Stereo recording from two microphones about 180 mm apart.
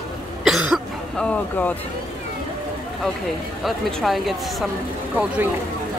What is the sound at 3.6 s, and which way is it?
Speech, centre (ahead or behind).